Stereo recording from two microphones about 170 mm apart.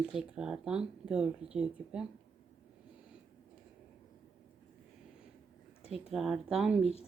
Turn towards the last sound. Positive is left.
turn(degrees=-5)  # may be behind; listen again after turning